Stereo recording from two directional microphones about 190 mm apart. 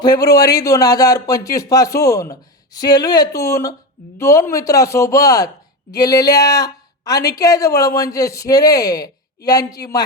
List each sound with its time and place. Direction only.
0.0 s a woman's voice: 20° left (ahead or behind)